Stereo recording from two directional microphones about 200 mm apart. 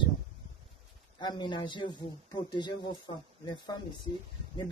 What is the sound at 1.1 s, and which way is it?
Speech, 20° left (ahead or behind).